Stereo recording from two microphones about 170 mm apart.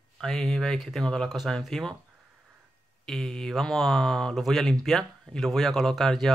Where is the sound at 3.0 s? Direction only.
5° left (ahead or behind).